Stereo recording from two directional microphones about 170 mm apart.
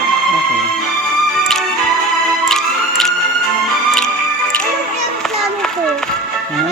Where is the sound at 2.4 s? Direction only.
Centre (ahead or behind).